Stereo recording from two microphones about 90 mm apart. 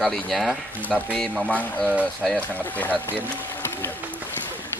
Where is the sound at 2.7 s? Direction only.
20° left (ahead or behind).